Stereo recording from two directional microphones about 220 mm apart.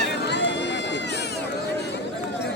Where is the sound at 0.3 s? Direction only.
50° left (ahead or behind).